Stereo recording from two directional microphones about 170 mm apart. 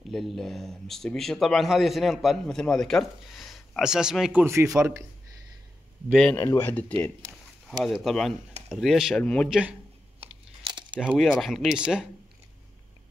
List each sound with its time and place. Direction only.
0.1 s speech: centre (ahead or behind); by 5.0 s 15° right (ahead or behind)
6.3 s speech: 15° left (ahead or behind)
7.8 s speech: centre (ahead or behind)
9.5 s a man's voice: 5° right (ahead or behind)
10.2 s crunch: 25° right (ahead or behind)
11.0 s speech: 5° right (ahead or behind)